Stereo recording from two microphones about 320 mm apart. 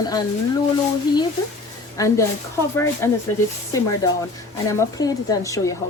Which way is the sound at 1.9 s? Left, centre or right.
Centre.